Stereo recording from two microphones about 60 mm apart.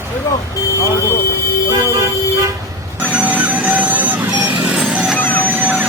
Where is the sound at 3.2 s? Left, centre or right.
Right.